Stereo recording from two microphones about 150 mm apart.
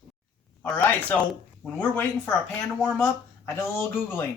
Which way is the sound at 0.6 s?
10° left (ahead or behind).